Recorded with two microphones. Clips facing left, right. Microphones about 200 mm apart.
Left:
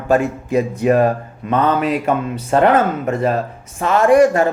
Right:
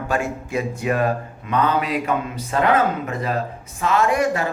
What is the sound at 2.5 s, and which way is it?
Speech, 50° left (ahead or behind).